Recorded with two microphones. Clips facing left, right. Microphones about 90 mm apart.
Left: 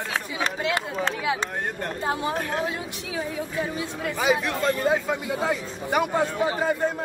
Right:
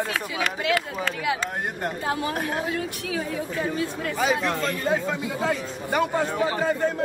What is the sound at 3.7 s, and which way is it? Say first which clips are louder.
Speech: right 2 dB; 15° left (ahead or behind).